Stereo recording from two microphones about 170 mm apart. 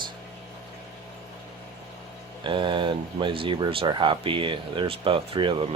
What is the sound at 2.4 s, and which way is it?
Speech, 30° right (ahead or behind).